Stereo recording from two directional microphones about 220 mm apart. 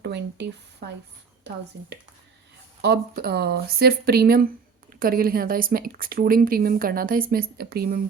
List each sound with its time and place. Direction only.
0.0 s speech: 50° right (ahead or behind)
2.8 s speech: 45° right (ahead or behind)